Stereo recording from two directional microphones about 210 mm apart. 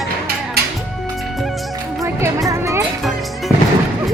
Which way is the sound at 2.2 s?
15° right (ahead or behind).